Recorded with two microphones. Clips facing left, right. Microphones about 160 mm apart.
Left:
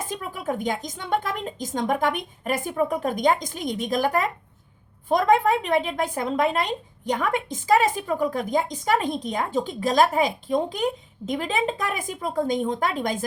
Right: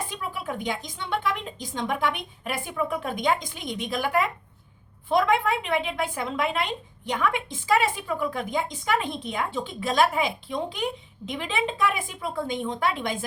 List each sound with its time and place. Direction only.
0.0 s a woman's voice: 45° left (ahead or behind)